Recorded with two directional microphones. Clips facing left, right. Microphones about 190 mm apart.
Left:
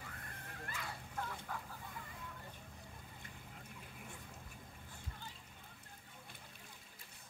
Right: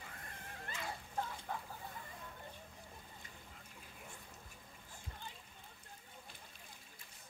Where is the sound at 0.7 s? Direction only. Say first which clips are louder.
Right 3 dB; 25° right (ahead or behind).